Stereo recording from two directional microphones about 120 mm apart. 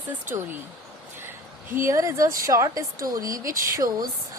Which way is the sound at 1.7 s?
25° right (ahead or behind).